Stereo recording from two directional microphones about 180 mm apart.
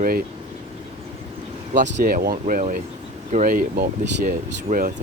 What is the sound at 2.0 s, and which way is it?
Speech, 50° right (ahead or behind).